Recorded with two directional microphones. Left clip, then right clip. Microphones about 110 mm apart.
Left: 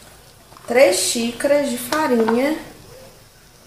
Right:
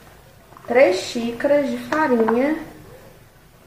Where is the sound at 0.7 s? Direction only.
20° left (ahead or behind).